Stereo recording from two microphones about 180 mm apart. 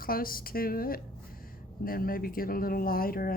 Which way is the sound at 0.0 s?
55° left (ahead or behind).